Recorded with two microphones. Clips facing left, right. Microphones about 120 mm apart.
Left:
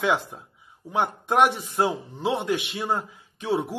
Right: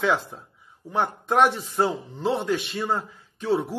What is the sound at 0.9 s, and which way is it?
A man's voice, 15° left (ahead or behind).